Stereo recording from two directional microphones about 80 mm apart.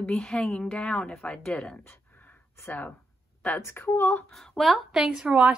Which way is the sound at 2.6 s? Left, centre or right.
Left.